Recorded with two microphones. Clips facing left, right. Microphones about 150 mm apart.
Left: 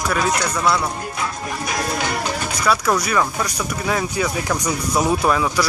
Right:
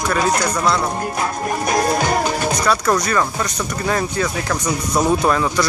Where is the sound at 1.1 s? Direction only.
45° right (ahead or behind).